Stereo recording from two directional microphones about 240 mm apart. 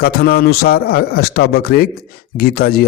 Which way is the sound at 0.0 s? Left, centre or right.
Left.